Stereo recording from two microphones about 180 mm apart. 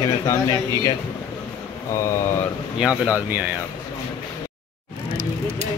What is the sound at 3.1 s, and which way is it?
Speech, 10° right (ahead or behind).